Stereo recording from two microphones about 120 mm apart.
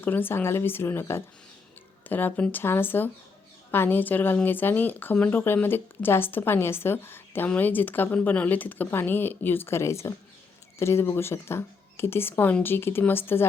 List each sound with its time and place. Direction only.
0.0 s a woman's voice: 15° left (ahead or behind)